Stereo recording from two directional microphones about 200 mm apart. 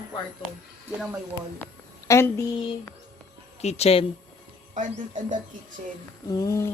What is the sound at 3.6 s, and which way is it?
Speech, 35° left (ahead or behind).